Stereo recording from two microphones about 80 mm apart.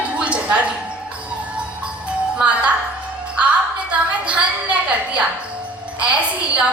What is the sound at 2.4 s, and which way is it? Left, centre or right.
Speech, centre.